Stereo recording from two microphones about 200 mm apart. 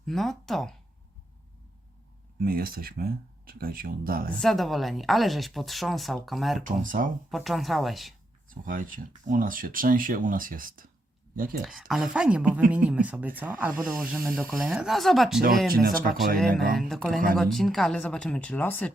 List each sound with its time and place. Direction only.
0.0 s speech: centre (ahead or behind)
2.4 s speech: 45° right (ahead or behind)
4.4 s a woman's voice: centre (ahead or behind)
6.7 s speech: 40° right (ahead or behind)
7.3 s a woman's voice: centre (ahead or behind)
8.6 s speech: 45° right (ahead or behind)
11.9 s a woman's voice: centre (ahead or behind)
15.7 s speech: 45° right (ahead or behind)
16.6 s a woman's voice: centre (ahead or behind)